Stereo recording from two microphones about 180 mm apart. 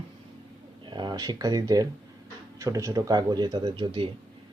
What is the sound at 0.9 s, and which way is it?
Speech, 25° right (ahead or behind).